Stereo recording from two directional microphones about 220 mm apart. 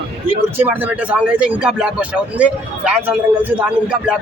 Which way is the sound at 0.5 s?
10° right (ahead or behind).